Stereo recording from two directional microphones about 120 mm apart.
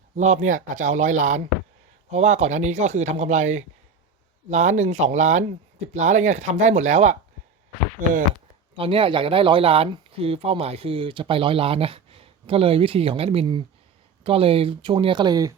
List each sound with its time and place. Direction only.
0.2 s speech: 90° right
2.0 s speech: 75° right (ahead or behind)
8.0 s speech: 90° right
8.7 s speech: 50° right (ahead or behind); by 15.5 s 30° right (ahead or behind)